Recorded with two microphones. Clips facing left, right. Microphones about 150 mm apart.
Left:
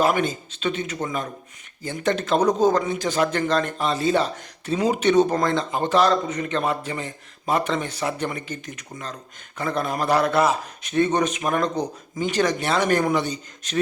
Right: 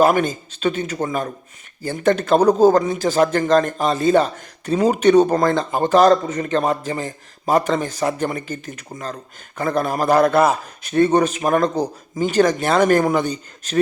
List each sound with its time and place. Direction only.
0.0 s speech: 45° right (ahead or behind)
2.4 s a man's voice: 35° right (ahead or behind); by 10.5 s 50° right (ahead or behind)
11.1 s a man's voice: 35° right (ahead or behind)